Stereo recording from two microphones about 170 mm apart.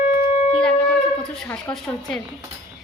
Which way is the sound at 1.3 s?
5° left (ahead or behind).